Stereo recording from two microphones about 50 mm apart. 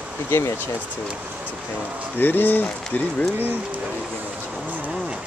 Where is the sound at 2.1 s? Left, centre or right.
Left.